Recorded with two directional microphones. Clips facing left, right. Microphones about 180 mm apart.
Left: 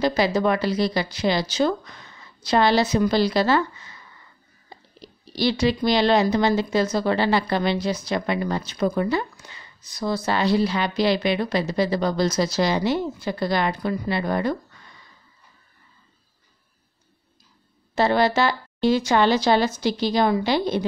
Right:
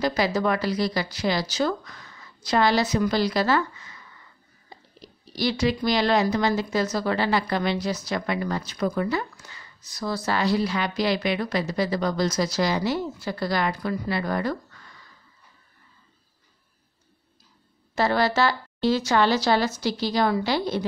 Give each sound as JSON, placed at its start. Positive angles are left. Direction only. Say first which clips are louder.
{"t": 0.0, "sound": "speech", "louder": "left 3 dB", "side_deg": 25}
{"t": 5.0, "sound": "speech", "louder": "left 3 dB", "side_deg": 30}
{"t": 17.9, "sound": "speech", "louder": "left 3 dB", "side_deg": 20}